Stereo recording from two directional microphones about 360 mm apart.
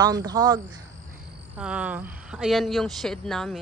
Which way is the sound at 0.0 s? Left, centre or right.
Centre.